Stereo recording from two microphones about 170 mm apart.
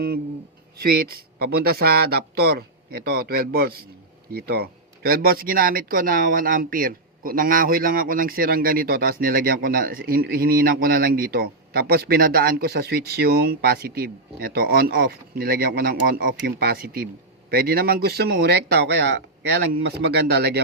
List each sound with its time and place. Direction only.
0.8 s speech: 60° right (ahead or behind)